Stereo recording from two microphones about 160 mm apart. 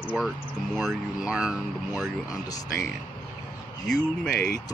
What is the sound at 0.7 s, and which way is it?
Speech, 5° right (ahead or behind).